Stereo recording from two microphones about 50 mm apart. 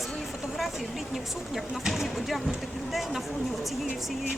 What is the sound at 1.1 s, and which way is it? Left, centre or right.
Speech, centre.